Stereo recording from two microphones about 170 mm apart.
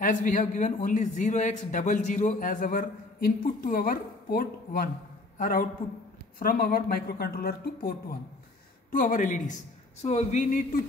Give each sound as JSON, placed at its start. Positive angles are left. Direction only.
{"t": 0.0, "sound": "a man's voice", "side_deg": 50}